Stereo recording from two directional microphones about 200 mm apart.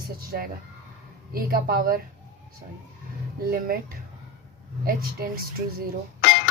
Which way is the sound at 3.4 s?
50° right (ahead or behind).